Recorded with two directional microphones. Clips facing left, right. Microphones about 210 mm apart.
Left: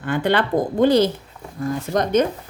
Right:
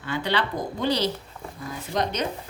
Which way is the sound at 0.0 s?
50° left (ahead or behind).